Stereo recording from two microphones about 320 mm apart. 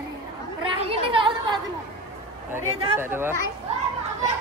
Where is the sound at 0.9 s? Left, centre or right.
Centre.